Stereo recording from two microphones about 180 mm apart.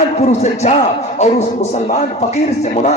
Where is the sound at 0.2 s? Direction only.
40° left (ahead or behind).